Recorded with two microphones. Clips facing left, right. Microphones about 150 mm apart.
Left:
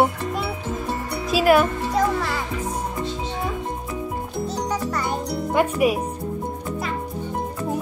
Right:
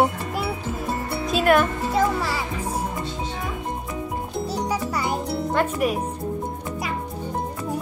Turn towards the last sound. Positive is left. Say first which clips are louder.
# left 3 dB
turn(degrees=10)  # may be behind; listen again after turning